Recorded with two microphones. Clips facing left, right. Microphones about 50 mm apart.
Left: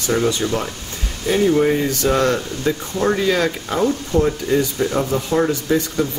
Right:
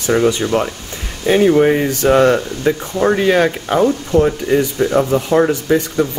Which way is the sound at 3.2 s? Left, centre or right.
Right.